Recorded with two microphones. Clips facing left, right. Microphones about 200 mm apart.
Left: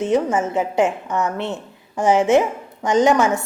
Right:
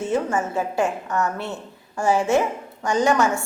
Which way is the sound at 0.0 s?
20° left (ahead or behind).